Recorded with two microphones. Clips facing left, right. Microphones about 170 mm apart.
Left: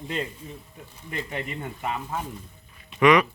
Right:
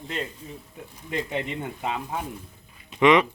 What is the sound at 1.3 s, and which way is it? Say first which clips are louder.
Speech: right 3 dB; 20° right (ahead or behind).